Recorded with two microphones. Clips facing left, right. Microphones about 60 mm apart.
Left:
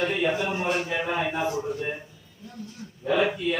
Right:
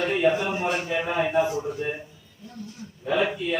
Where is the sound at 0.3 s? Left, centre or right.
Right.